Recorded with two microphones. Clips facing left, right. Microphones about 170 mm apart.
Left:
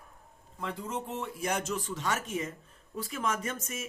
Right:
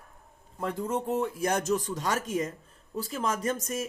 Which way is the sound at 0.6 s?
45° right (ahead or behind).